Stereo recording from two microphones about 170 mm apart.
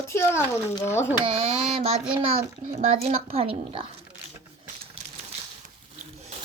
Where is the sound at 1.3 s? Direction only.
35° right (ahead or behind).